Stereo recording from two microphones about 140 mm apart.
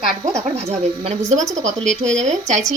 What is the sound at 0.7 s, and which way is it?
Speech, 50° right (ahead or behind).